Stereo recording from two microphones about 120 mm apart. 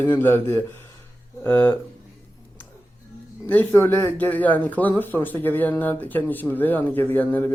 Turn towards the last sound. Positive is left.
turn(degrees=15)  # may be behind; listen again after turning